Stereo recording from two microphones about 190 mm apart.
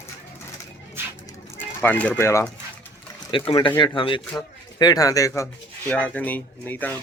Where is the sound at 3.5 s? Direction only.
25° left (ahead or behind).